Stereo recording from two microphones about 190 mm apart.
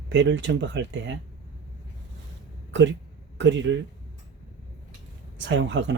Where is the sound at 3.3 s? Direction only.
75° right (ahead or behind).